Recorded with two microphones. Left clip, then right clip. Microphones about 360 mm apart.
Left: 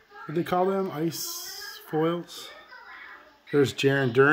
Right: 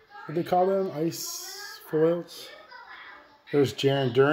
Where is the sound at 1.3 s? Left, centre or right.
Left.